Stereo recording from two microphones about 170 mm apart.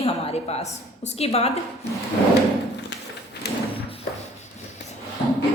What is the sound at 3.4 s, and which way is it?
Thump, 80° left.